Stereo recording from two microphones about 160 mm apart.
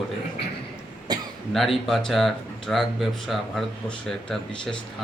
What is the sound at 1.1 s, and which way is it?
Cough, 25° right (ahead or behind).